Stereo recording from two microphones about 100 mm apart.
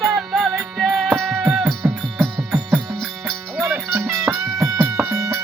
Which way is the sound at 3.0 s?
Centre (ahead or behind).